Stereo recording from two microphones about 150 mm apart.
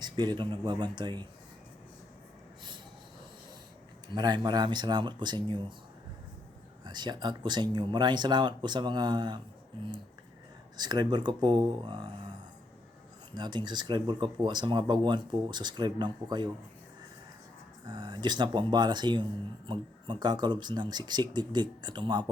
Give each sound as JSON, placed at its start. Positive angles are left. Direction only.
{"t": 0.0, "sound": "speech", "side_deg": -30}
{"t": 4.1, "sound": "speech", "side_deg": -30}
{"t": 6.8, "sound": "speech", "side_deg": -30}
{"t": 10.8, "sound": "speech", "side_deg": -30}
{"t": 13.3, "sound": "speech", "side_deg": -30}
{"t": 17.8, "sound": "speech", "side_deg": -30}